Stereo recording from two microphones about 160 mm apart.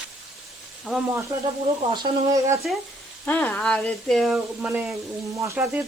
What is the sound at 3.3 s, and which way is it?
Speech, 10° left (ahead or behind).